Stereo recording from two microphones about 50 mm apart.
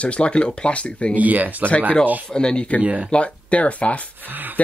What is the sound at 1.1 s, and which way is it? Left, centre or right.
Speech, right.